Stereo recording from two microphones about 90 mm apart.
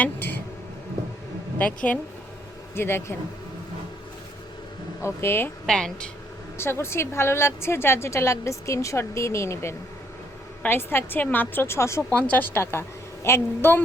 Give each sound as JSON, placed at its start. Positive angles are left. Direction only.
{"t": 1.5, "sound": "speech", "side_deg": 15}
{"t": 2.7, "sound": "a woman's voice", "side_deg": 25}
{"t": 5.0, "sound": "a woman's voice", "side_deg": 25}
{"t": 5.6, "sound": "speech", "side_deg": 5}
{"t": 6.6, "sound": "a woman's voice", "side_deg": 30}
{"t": 12.1, "sound": "a woman's voice", "side_deg": 15}